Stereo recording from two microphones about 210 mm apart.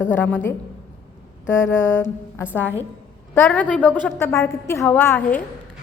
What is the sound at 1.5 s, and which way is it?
Mantra, 65° left (ahead or behind).